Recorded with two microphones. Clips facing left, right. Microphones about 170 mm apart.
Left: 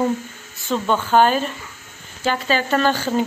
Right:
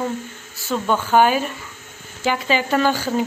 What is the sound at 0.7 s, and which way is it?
Speech, 5° right (ahead or behind).